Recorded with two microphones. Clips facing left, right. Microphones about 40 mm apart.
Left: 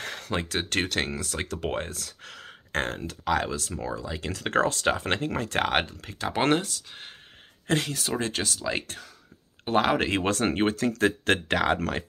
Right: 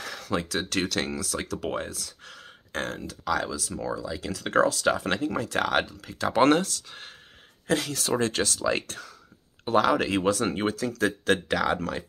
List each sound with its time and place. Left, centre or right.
0.0 s speech: left
2.8 s speech: left
4.0 s speech: left
4.4 s speech: left
6.1 s speech: centre
7.6 s speech: left
8.2 s speech: centre
9.7 s speech: left